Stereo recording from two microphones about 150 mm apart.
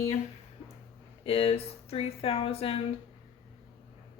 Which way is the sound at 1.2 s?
40° left (ahead or behind).